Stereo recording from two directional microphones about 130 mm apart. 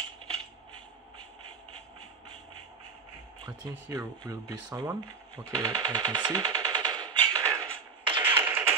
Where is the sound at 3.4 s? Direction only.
25° right (ahead or behind).